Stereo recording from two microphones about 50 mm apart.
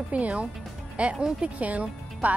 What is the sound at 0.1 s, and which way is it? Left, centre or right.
Speech, right.